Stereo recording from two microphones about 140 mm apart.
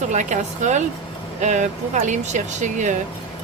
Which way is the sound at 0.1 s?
60° right (ahead or behind).